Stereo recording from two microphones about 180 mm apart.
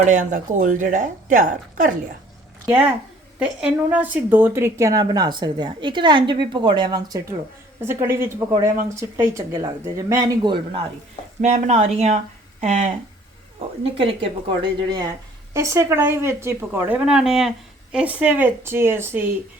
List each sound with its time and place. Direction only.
0.0 s a woman's voice: 45° right (ahead or behind)
2.6 s a woman's voice: 5° right (ahead or behind); by 10.8 s 25° right (ahead or behind)
11.3 s a woman's voice: 40° right (ahead or behind); by 19.2 s 15° right (ahead or behind)